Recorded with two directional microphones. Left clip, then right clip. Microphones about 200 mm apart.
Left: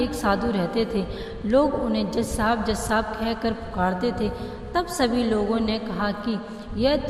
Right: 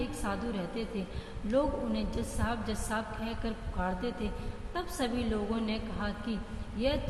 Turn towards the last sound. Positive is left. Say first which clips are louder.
# left 10 dB
turn(degrees=45)  # may be behind; listen again after turning